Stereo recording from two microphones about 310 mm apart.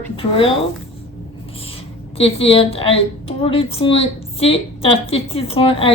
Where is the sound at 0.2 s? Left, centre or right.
Centre.